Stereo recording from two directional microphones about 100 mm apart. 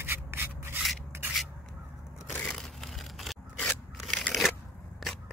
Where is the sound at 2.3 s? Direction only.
5° left (ahead or behind).